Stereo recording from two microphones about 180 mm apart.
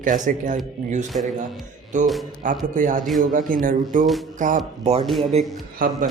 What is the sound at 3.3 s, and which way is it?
Speech, 50° right (ahead or behind).